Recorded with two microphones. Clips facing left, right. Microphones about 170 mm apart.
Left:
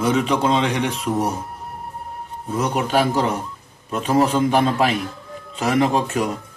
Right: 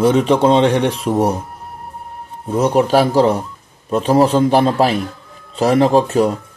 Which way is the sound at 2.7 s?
35° right (ahead or behind).